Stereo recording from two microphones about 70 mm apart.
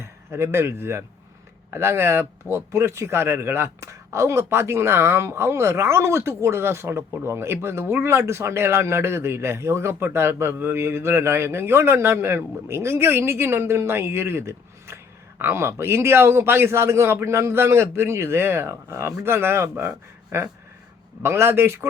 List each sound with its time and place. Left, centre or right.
0.0 s a man's voice: right